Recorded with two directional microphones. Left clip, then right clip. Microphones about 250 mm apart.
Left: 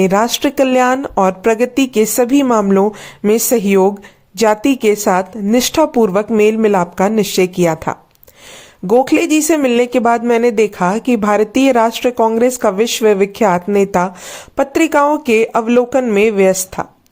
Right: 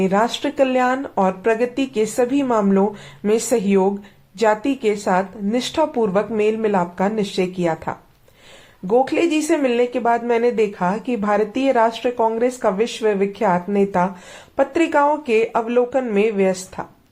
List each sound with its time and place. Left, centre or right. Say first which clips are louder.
0.0 s speech: left 6 dB; left